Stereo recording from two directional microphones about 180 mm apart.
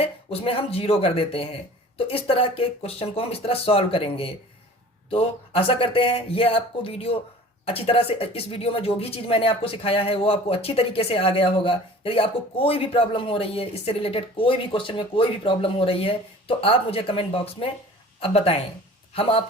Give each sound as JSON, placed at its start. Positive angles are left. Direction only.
{"t": 0.0, "sound": "speech", "side_deg": 35}